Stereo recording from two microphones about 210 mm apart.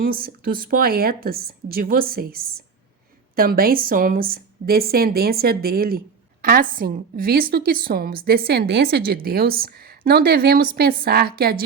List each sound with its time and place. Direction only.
0.0 s a woman's voice: 45° right (ahead or behind)